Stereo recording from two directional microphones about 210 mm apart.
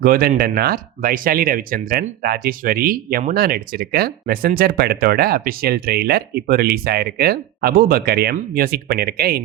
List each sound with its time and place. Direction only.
0.0 s speech: 45° right (ahead or behind)